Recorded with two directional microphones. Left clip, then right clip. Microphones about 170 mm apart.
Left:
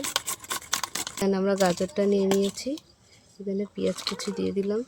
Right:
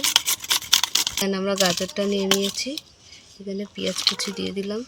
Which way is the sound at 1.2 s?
35° left (ahead or behind).